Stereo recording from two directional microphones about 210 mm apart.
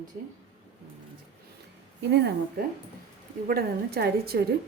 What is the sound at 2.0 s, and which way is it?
A woman's voice, 55° right (ahead or behind).